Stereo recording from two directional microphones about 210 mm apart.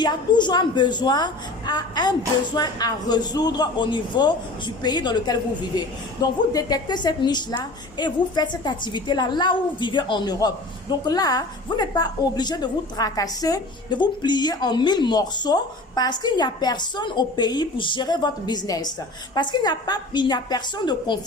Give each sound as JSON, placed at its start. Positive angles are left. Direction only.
{"t": 0.0, "sound": "a woman's voice", "side_deg": 20}